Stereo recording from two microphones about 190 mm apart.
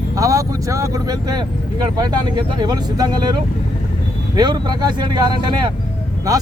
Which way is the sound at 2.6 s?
20° right (ahead or behind).